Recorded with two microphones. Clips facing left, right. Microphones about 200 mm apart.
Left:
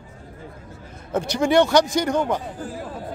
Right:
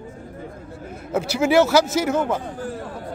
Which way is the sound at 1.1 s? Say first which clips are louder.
Right 1 dB; 5° right (ahead or behind).